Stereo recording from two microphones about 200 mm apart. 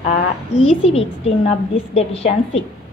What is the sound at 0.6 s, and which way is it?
A woman's voice, 30° left (ahead or behind).